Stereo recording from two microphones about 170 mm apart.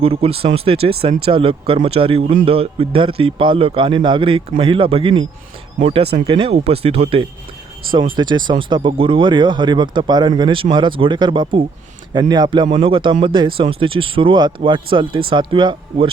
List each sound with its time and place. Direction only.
0.0 s speech: 35° right (ahead or behind)